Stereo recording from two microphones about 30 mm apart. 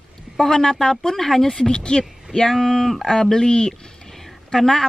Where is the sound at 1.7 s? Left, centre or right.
Left.